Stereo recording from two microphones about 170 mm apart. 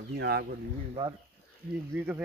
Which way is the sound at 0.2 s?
70° right (ahead or behind).